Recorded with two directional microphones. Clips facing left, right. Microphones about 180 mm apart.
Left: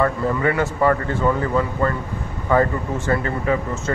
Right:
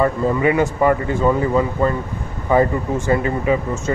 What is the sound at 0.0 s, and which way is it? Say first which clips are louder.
Speech: right 3 dB; 15° right (ahead or behind).